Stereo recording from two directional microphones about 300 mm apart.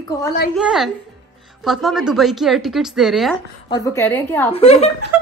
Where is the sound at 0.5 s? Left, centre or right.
Centre.